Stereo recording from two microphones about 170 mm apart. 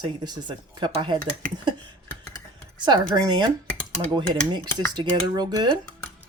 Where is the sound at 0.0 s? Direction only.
25° right (ahead or behind).